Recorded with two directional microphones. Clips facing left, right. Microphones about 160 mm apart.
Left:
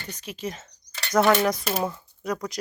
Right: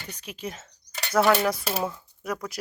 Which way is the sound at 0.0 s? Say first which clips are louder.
Left 3 dB; 10° right (ahead or behind).